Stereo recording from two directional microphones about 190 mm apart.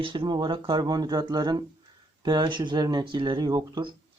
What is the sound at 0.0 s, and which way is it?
Speech, 25° right (ahead or behind).